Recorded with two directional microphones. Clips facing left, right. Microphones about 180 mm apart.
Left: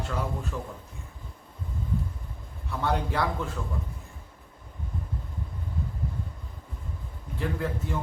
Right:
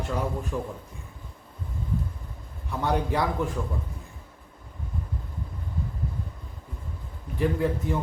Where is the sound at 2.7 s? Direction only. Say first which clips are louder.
Right 2 dB; 15° right (ahead or behind).